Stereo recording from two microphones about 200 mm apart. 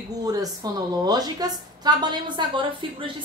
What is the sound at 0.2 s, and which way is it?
A woman's voice, 20° right (ahead or behind).